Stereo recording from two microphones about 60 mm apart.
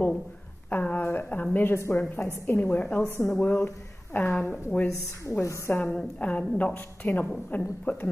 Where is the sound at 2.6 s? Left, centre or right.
Left.